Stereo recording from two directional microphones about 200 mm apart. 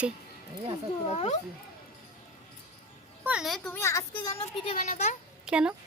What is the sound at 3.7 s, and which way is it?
Speech, 15° left (ahead or behind).